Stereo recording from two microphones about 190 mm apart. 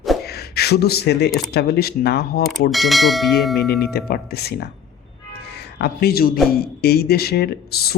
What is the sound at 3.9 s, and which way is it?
A man's voice, 55° left (ahead or behind).